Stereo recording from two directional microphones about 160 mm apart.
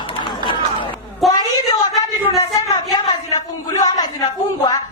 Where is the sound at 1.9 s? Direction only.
25° left (ahead or behind).